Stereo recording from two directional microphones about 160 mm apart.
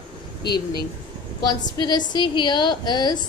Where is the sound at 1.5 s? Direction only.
25° left (ahead or behind).